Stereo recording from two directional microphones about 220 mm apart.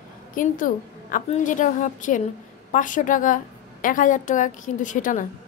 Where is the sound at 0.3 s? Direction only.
40° left (ahead or behind).